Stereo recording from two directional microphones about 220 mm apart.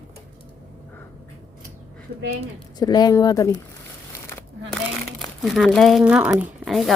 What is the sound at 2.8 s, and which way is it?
Speech, 20° left (ahead or behind).